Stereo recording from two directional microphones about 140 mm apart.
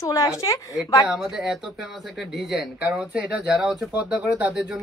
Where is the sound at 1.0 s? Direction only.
5° right (ahead or behind).